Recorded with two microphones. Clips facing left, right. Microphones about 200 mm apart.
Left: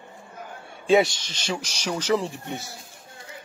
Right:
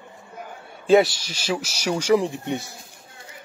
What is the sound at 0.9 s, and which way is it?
A man's voice, 5° right (ahead or behind).